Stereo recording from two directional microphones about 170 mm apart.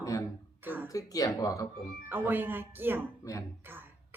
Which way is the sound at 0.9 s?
20° left (ahead or behind).